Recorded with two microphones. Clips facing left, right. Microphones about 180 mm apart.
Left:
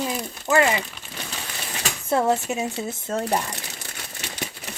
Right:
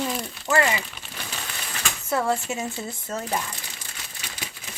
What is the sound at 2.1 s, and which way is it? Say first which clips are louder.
Speech: left 3 dB; 25° left (ahead or behind).